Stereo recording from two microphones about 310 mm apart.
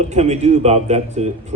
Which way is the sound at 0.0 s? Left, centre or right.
Right.